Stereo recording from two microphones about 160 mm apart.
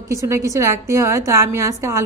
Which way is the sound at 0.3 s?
20° right (ahead or behind).